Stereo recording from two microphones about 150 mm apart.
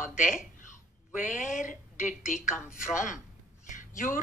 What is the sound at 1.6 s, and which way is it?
Speech, 60° left (ahead or behind).